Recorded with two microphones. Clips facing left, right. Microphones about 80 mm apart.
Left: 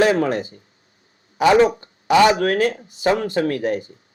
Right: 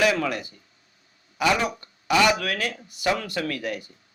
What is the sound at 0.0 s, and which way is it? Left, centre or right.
Speech, left.